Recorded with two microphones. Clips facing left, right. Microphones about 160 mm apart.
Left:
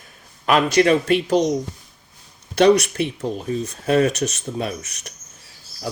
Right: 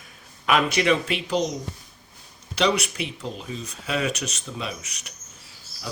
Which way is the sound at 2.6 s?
45° left (ahead or behind).